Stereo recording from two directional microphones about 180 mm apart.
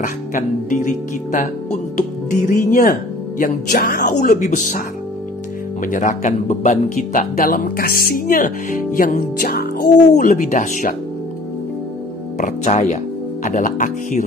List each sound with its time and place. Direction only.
0.0 s speech: 45° left (ahead or behind)
12.4 s speech: 40° left (ahead or behind)